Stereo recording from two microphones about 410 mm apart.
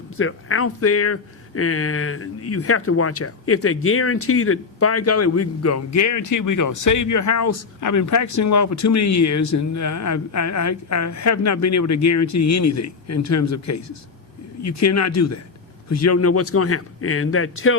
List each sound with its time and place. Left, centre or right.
0.2 s speech: left